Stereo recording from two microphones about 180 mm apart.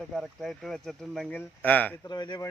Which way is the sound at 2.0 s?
25° left (ahead or behind).